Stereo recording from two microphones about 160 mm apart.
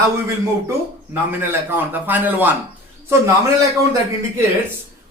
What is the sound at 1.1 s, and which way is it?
Speech, 15° right (ahead or behind).